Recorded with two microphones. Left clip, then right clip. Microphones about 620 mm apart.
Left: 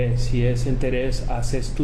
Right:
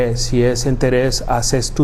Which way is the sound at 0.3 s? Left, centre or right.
Right.